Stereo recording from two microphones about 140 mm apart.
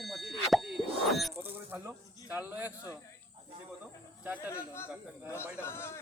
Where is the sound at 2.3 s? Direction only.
15° right (ahead or behind).